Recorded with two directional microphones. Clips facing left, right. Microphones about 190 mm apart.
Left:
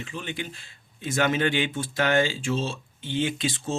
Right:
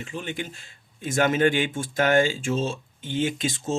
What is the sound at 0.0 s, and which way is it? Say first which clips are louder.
Speech: right 2 dB; 45° right (ahead or behind).